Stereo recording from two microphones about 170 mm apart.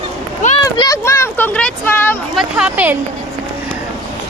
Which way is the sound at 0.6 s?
20° left (ahead or behind).